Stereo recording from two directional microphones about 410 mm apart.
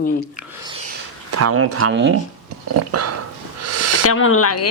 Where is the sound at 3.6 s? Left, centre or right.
Right.